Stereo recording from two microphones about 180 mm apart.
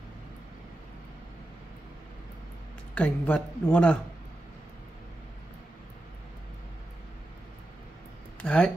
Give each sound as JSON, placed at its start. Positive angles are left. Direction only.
{"t": 2.9, "sound": "speech", "side_deg": 5}
{"t": 8.4, "sound": "speech", "side_deg": 5}